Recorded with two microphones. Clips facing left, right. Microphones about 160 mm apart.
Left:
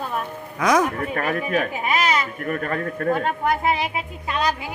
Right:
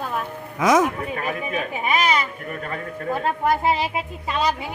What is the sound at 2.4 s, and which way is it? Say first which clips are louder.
Speech: left 5 dB; 55° left (ahead or behind).